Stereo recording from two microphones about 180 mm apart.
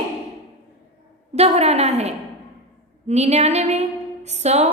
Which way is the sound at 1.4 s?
35° right (ahead or behind).